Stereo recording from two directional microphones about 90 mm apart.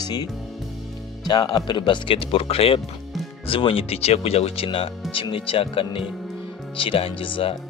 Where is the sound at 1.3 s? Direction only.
45° left (ahead or behind).